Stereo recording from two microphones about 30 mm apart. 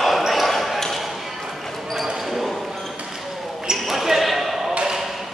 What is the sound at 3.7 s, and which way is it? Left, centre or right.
Basketball bounce, centre.